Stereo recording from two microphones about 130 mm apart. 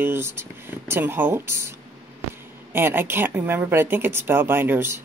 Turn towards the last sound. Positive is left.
turn(degrees=-15)  # may be behind; listen again after turning